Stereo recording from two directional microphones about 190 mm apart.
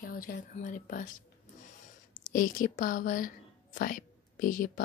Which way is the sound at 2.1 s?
45° left (ahead or behind).